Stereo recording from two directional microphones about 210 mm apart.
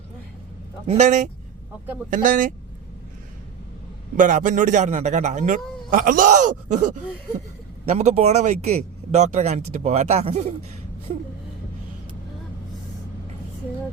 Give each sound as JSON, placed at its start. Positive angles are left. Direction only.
{"t": 0.9, "sound": "speech", "side_deg": -35}
{"t": 4.2, "sound": "speech", "side_deg": -40}